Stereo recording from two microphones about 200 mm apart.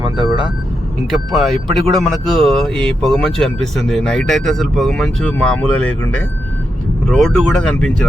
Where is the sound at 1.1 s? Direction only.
Centre (ahead or behind).